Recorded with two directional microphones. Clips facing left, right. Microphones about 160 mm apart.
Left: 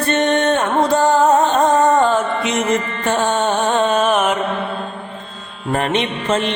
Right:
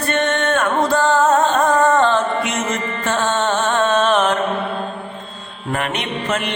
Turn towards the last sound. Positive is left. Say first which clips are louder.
# left 3 dB
turn(degrees=25)  # may be behind; listen again after turning